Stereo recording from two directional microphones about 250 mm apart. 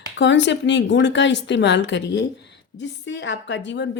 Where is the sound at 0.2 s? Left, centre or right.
Left.